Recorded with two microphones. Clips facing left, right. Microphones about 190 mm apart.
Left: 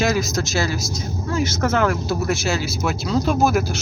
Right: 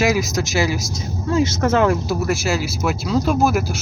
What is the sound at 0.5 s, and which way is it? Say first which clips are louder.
Speech: right 3 dB; 10° right (ahead or behind).